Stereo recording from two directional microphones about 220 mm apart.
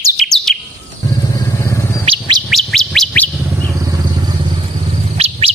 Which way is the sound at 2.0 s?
20° right (ahead or behind).